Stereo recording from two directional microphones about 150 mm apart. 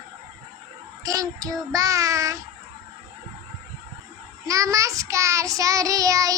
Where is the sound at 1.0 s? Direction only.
25° right (ahead or behind).